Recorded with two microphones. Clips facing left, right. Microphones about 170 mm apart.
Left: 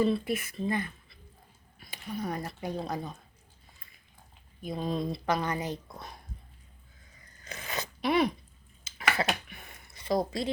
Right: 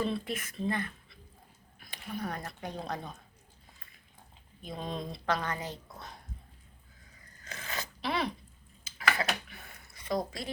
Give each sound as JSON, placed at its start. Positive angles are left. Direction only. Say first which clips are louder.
{"t": 0.0, "sound": "a woman's voice", "louder": "left 6 dB", "side_deg": 5}
{"t": 1.8, "sound": "a sound", "louder": "left 2 dB", "side_deg": 0}
{"t": 2.2, "sound": "a woman's voice", "louder": "left 5 dB", "side_deg": 10}
{"t": 4.6, "sound": "a woman's voice", "louder": "left 6 dB", "side_deg": 5}
{"t": 7.4, "sound": "a sound", "louder": "left 3 dB", "side_deg": 20}
{"t": 9.0, "sound": "dishes", "louder": "left 2 dB", "side_deg": 25}